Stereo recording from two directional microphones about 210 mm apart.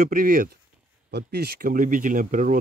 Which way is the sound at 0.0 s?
45° right (ahead or behind).